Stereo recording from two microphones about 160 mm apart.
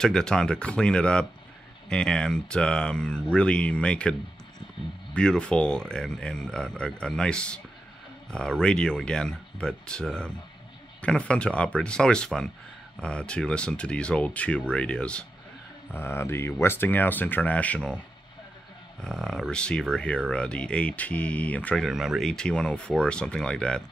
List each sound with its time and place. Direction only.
0.0 s speech: 5° left (ahead or behind)
21.8 s speech: centre (ahead or behind)